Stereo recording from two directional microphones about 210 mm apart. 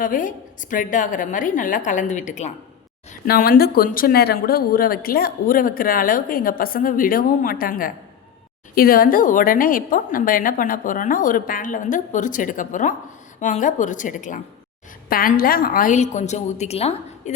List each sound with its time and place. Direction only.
0.0 s a woman's voice: 40° left (ahead or behind)